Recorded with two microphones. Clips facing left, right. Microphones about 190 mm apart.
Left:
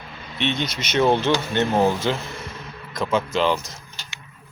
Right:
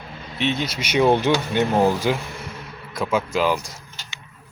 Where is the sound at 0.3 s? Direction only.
5° right (ahead or behind).